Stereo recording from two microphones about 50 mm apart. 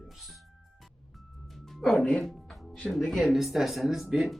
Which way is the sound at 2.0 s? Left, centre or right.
Centre.